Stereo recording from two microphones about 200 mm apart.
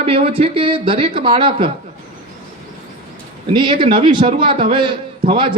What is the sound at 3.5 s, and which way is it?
Speech, 25° right (ahead or behind).